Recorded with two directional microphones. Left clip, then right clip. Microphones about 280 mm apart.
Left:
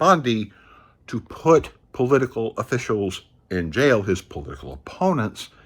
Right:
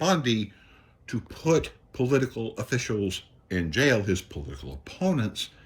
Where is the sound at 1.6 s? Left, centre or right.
Centre.